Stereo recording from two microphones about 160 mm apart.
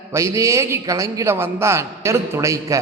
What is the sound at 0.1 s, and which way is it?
A man's voice, 20° right (ahead or behind).